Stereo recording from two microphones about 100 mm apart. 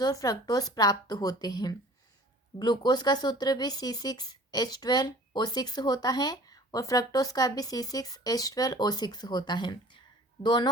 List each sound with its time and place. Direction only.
0.0 s speech: 40° left (ahead or behind)